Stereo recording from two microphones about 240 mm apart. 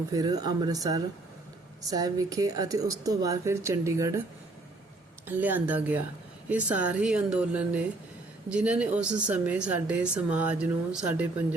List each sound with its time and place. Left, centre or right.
0.1 s speech: centre
5.2 s speech: centre